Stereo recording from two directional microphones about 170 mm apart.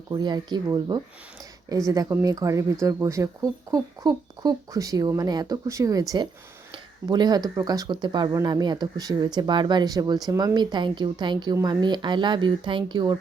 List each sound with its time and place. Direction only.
0.1 s speech: 25° right (ahead or behind)